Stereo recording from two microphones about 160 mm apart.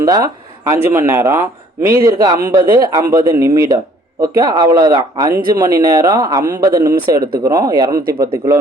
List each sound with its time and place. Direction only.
0.0 s speech: 20° right (ahead or behind)
7.2 s speech: 70° right (ahead or behind)
7.4 s speech: 20° right (ahead or behind)